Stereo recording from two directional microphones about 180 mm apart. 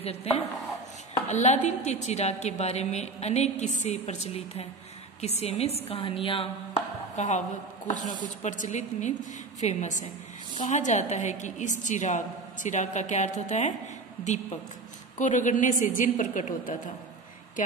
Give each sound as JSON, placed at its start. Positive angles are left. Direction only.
{"t": 0.0, "sound": "a woman's voice", "side_deg": 35}
{"t": 7.2, "sound": "a woman's voice", "side_deg": 40}